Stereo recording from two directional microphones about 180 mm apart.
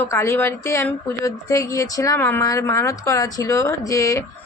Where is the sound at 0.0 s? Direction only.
15° left (ahead or behind).